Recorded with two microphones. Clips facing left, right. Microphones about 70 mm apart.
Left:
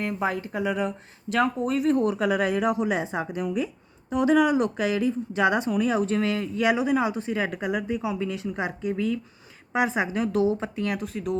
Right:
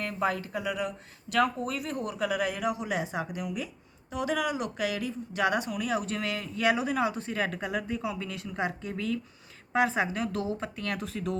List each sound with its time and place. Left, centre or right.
0.0 s speech: left
6.7 s speech: left
10.9 s speech: centre